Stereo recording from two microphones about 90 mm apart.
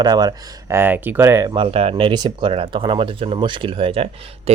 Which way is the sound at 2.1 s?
60° right (ahead or behind).